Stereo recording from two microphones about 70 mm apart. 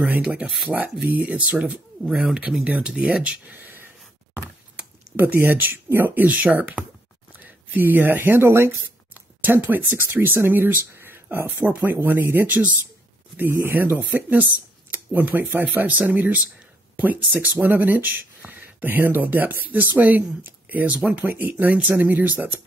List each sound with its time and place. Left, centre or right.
0.7 s speech: right
2.0 s speech: centre
2.6 s speech: centre
3.5 s a sound: right
4.7 s speech: right
6.3 s speech: centre